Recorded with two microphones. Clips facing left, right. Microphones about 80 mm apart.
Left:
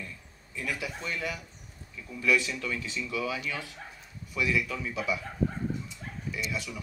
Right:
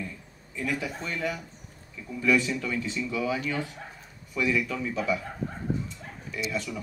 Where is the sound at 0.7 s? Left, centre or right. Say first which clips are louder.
Right 3 dB; right.